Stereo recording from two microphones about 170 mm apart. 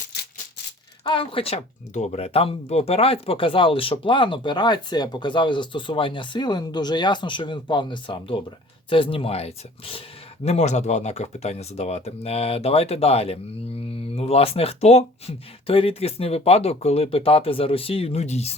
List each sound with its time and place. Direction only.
1.0 s speech: 30° left (ahead or behind)